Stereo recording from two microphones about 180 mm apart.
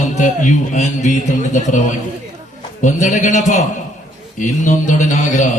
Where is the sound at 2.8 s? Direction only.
45° left (ahead or behind).